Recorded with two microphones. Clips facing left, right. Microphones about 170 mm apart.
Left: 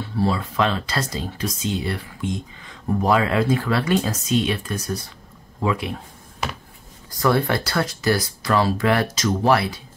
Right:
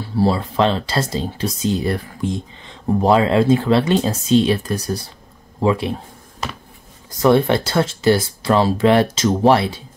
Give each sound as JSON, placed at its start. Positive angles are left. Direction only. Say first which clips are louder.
{"t": 0.1, "sound": "speech", "louder": "right 5 dB", "side_deg": -30}
{"t": 7.1, "sound": "speech", "louder": "right 6 dB", "side_deg": -20}